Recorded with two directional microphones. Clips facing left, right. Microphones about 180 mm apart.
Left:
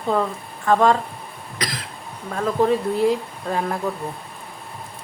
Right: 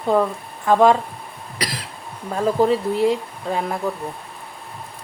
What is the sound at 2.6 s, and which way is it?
Speech, centre (ahead or behind).